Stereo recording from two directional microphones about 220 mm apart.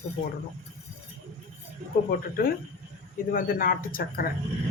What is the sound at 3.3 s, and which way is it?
Speech, 40° left (ahead or behind).